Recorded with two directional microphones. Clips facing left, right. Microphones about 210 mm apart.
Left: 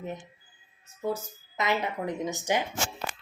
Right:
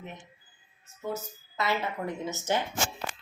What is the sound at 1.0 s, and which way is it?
Speech, 35° left (ahead or behind).